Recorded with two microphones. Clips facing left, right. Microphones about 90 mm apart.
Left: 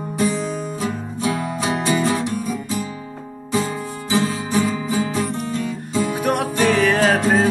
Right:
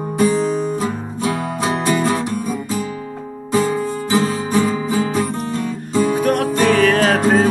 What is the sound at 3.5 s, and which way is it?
Music, 40° right (ahead or behind).